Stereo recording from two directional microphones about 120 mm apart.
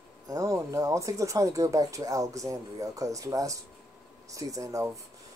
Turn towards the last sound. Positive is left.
turn(degrees=-25)  # may be behind; listen again after turning